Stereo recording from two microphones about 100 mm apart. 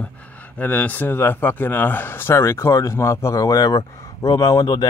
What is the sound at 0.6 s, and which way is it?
Speech, 15° left (ahead or behind).